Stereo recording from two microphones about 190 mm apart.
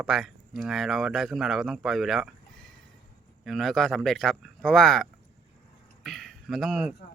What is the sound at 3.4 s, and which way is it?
Speech, centre (ahead or behind).